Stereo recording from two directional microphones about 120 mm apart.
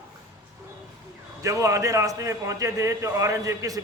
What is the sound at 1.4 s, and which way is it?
A man's voice, 25° right (ahead or behind).